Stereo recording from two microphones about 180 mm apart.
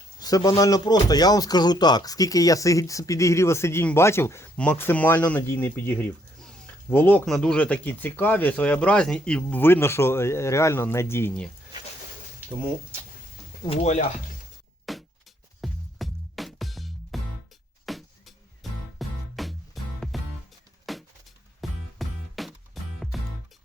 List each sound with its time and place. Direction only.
0.2 s speech: 20° left (ahead or behind)
13.7 s speech: 40° left (ahead or behind)
14.9 s music: centre (ahead or behind)
20.9 s a sound: centre (ahead or behind)
21.6 s music: centre (ahead or behind)